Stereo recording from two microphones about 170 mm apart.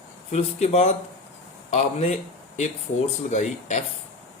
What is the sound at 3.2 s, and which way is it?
Speech, 40° left (ahead or behind).